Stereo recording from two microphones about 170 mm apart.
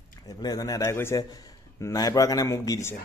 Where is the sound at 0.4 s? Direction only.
20° left (ahead or behind).